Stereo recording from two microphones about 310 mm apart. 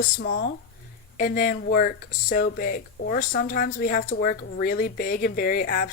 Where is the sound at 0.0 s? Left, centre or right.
Left.